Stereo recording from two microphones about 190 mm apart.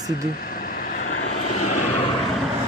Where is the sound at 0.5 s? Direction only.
50° left (ahead or behind).